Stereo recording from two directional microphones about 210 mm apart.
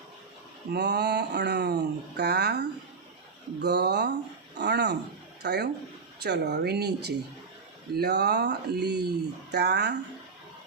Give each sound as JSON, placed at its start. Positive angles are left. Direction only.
{"t": 0.7, "sound": "speech", "side_deg": -50}